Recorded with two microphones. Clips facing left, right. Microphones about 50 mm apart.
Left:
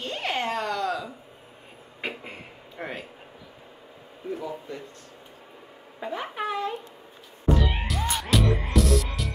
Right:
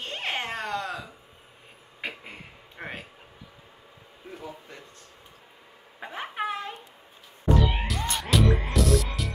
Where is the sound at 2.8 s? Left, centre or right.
Centre.